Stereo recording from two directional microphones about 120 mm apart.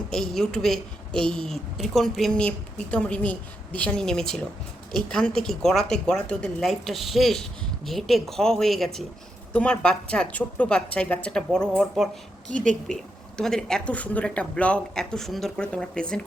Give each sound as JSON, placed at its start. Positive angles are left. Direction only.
{"t": 0.1, "sound": "a woman's voice", "side_deg": 5}